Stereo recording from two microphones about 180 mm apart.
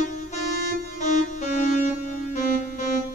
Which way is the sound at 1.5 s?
40° left (ahead or behind).